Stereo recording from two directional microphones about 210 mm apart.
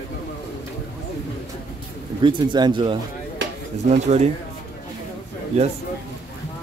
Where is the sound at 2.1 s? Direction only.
20° right (ahead or behind).